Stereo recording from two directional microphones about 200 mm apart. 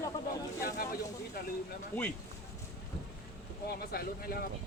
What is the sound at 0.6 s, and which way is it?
Speech, 50° left (ahead or behind).